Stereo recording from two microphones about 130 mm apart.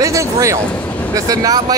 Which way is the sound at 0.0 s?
25° right (ahead or behind).